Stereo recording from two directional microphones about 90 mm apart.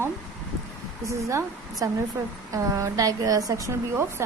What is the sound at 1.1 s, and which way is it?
A woman's voice, 35° right (ahead or behind).